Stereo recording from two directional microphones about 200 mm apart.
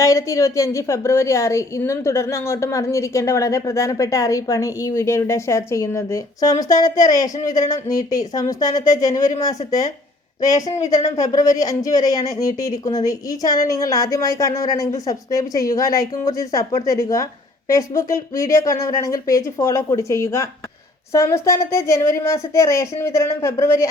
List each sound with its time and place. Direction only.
0.0 s a woman's voice: 15° left (ahead or behind)